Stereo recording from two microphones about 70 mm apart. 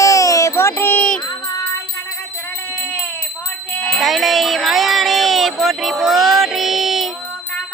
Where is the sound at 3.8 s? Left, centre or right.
Centre.